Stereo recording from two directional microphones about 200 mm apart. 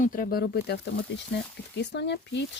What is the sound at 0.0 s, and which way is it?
Speech, 45° left (ahead or behind).